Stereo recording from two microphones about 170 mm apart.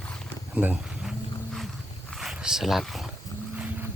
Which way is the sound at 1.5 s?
Centre (ahead or behind).